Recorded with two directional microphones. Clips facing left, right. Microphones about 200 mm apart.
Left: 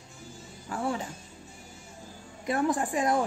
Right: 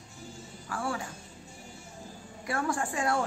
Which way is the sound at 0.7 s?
20° left (ahead or behind).